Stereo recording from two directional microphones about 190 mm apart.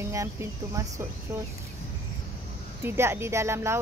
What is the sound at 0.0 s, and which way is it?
Speech, 15° right (ahead or behind).